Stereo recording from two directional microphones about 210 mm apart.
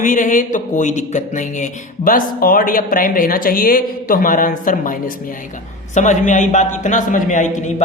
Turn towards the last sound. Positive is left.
turn(degrees=40)  # may be behind; listen again after turning